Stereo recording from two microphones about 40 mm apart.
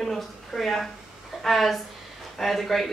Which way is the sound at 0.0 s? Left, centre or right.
Centre.